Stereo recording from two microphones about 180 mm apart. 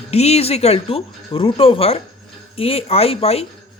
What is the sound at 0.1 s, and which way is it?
Speech, 35° left (ahead or behind).